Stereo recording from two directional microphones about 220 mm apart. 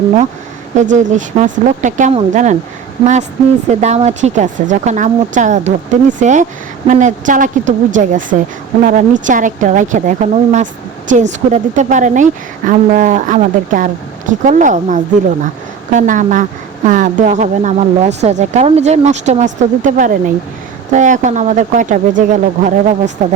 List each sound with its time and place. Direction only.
0.8 s a woman's voice: 35° right (ahead or behind)
3.7 s a woman's voice: 30° right (ahead or behind)